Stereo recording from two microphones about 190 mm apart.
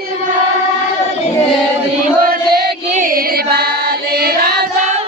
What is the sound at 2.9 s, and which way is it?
Music, 45° right (ahead or behind).